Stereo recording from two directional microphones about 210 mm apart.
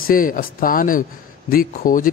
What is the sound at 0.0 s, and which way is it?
A man's voice, 40° left (ahead or behind).